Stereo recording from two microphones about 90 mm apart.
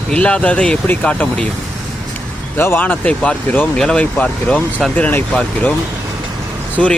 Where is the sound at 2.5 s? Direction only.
25° left (ahead or behind); by 4.9 s 10° left (ahead or behind).